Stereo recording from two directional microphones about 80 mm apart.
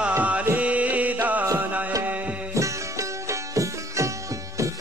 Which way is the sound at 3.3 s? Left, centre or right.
Right.